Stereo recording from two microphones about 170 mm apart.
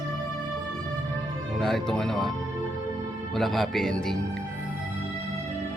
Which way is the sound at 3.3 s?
Centre (ahead or behind).